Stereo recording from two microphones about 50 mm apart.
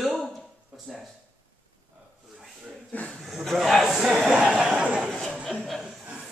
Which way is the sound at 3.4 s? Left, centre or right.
Centre.